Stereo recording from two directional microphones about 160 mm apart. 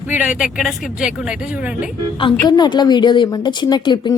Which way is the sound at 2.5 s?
25° left (ahead or behind).